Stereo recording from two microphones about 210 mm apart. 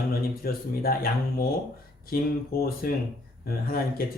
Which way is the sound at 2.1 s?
45° left (ahead or behind).